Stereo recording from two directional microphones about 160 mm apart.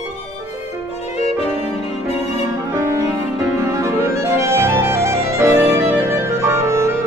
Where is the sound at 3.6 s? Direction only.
15° right (ahead or behind).